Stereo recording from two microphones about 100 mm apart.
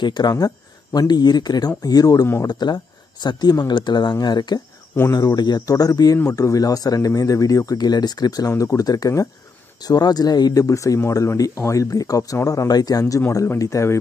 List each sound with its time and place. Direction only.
0.0 s speech: 45° left (ahead or behind); by 13.9 s 30° left (ahead or behind)